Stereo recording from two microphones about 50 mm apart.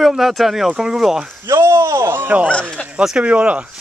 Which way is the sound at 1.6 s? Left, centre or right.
Right.